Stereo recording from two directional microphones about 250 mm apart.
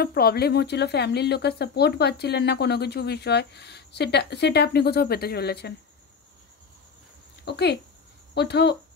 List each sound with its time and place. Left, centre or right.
0.0 s speech: left
7.4 s speech: left